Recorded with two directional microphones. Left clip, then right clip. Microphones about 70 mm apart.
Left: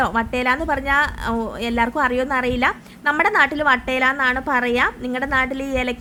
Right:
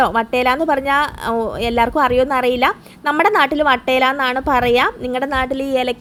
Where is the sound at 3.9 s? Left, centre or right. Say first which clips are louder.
Right 3 dB; right.